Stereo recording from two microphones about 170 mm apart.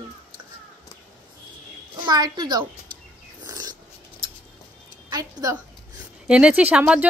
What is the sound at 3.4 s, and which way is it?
Dog, 25° right (ahead or behind).